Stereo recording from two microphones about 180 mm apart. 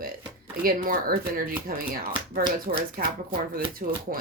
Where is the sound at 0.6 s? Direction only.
55° right (ahead or behind).